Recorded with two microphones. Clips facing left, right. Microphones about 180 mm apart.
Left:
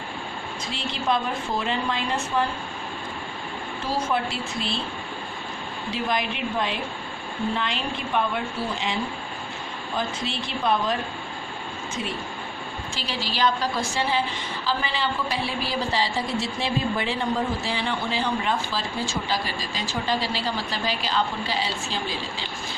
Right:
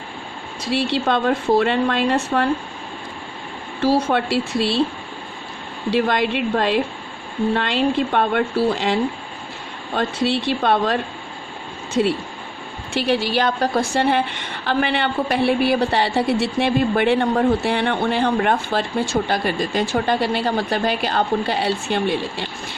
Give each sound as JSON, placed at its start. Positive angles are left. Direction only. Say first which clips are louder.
{"t": 0.6, "sound": "a woman's voice", "louder": "right 10 dB", "side_deg": -75}
{"t": 3.8, "sound": "a woman's voice", "louder": "right 8 dB", "side_deg": -75}
{"t": 5.9, "sound": "a woman's voice", "louder": "right 9 dB", "side_deg": -70}
{"t": 9.9, "sound": "a woman's voice", "louder": "right 9 dB", "side_deg": -70}
{"t": 12.9, "sound": "a woman's voice", "louder": "right 14 dB", "side_deg": -60}